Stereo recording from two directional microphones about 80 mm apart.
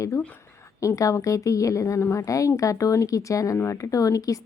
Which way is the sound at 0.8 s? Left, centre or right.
Left.